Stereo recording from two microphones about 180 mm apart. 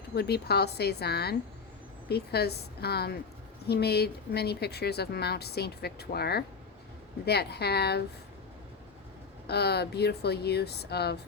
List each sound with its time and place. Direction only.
0.1 s a woman's voice: 65° left (ahead or behind)
9.5 s a woman's voice: 65° left (ahead or behind)